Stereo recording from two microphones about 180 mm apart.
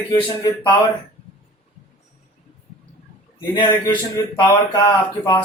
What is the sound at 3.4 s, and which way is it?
A man's voice, 25° left (ahead or behind).